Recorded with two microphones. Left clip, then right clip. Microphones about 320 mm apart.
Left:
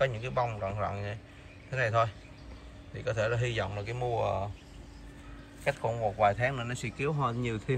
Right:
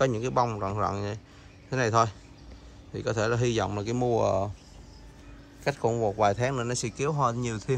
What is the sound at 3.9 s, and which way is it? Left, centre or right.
Speech, right.